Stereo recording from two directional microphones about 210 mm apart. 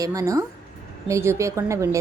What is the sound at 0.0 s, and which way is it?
A woman's voice, 15° right (ahead or behind).